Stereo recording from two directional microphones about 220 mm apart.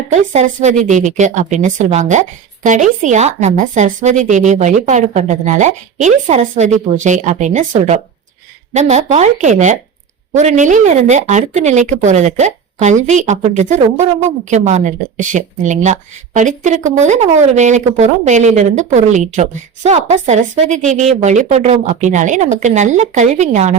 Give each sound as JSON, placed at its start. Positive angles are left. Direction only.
{"t": 0.1, "sound": "speech", "side_deg": -30}